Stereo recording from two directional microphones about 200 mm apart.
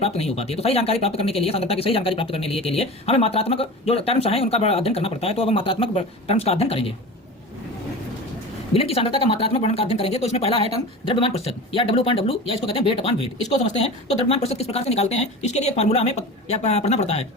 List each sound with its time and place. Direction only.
0.0 s speech: 30° left (ahead or behind)
8.7 s speech: 30° left (ahead or behind)